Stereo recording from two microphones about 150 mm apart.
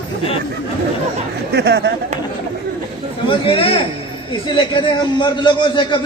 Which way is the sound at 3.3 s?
40° left (ahead or behind).